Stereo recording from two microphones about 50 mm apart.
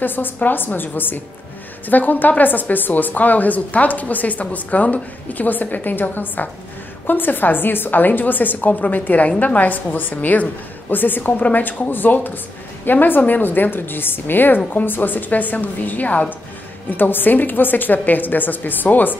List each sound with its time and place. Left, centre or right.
0.0 s a woman's voice: left